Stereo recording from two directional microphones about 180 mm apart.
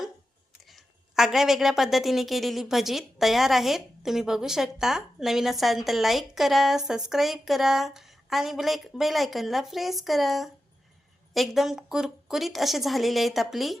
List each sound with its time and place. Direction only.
0.6 s a woman's voice: centre (ahead or behind)